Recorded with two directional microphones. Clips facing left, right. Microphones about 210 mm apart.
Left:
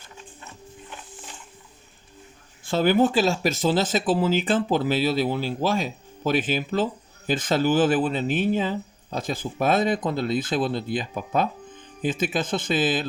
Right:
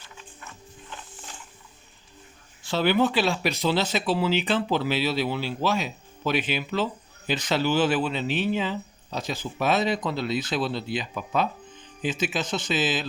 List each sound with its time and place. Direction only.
2.6 s speech: 45° left (ahead or behind)